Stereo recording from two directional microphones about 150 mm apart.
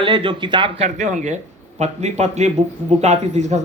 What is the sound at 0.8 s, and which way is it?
Speech, 55° right (ahead or behind).